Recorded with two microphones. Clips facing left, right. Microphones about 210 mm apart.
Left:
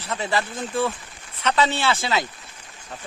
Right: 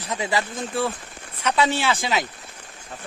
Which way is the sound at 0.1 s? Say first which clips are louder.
Even; 15° right (ahead or behind).